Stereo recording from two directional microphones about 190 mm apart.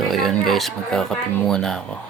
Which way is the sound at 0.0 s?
Centre (ahead or behind).